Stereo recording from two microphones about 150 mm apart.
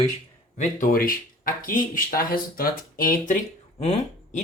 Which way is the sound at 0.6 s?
65° left (ahead or behind).